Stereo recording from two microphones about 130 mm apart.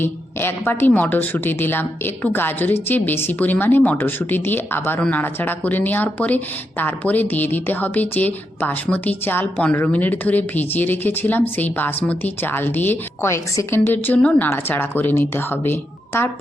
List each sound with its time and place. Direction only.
0.0 s a woman's voice: 15° left (ahead or behind)